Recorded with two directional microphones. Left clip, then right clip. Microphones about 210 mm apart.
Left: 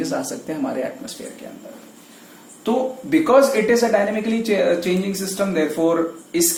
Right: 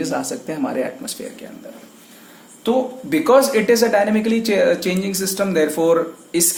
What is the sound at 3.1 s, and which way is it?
Speech, 45° right (ahead or behind).